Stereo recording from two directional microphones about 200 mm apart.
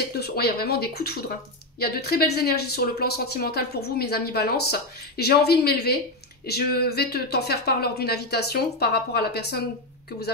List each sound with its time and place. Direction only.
0.1 s speech: 50° left (ahead or behind)